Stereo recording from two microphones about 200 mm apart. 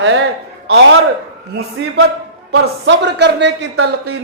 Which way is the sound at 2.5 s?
60° right (ahead or behind).